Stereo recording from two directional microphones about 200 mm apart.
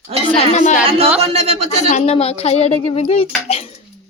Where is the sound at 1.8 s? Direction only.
35° left (ahead or behind).